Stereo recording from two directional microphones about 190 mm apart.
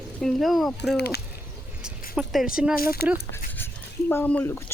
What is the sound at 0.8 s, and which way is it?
Speech, 60° left (ahead or behind).